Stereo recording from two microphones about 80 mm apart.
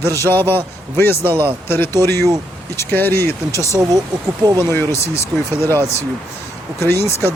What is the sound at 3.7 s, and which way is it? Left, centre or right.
Speech, right.